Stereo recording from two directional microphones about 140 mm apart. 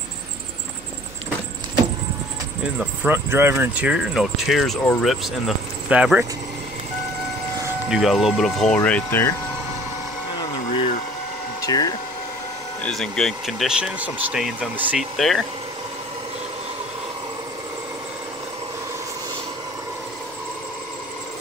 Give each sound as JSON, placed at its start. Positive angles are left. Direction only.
{"t": 2.8, "sound": "speech", "side_deg": -10}
{"t": 7.9, "sound": "speech", "side_deg": 0}
{"t": 11.6, "sound": "speech", "side_deg": 25}
{"t": 12.8, "sound": "speech", "side_deg": 5}
{"t": 15.1, "sound": "speech", "side_deg": 0}